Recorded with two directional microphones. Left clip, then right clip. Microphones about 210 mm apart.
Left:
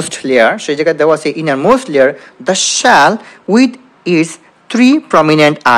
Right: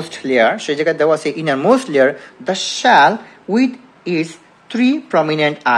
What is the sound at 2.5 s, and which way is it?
A woman's voice, 30° left (ahead or behind).